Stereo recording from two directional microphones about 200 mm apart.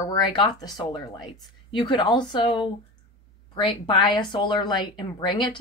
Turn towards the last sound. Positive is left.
turn(degrees=25)  # may be behind; listen again after turning